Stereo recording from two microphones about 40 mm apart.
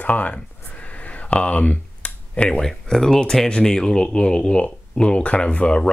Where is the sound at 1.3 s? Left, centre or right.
Left.